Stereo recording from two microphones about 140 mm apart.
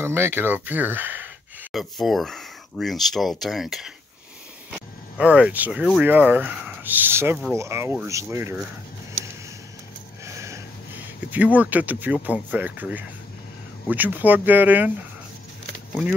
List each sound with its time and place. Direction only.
0.0 s speech: 15° right (ahead or behind)
1.7 s speech: centre (ahead or behind); by 8.5 s 20° right (ahead or behind)
10.2 s a sound: 20° right (ahead or behind)
11.2 s speech: 10° right (ahead or behind)